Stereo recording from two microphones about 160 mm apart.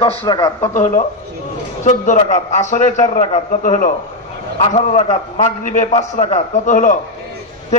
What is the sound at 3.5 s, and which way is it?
Speech, 55° left (ahead or behind).